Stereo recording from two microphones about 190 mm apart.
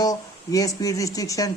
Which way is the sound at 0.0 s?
20° left (ahead or behind).